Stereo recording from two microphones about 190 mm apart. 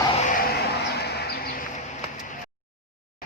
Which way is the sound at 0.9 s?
60° left (ahead or behind).